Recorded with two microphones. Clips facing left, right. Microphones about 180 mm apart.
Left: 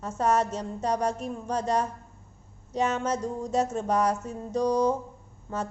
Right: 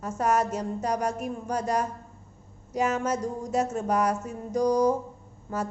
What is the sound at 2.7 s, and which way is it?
Speech, 10° right (ahead or behind).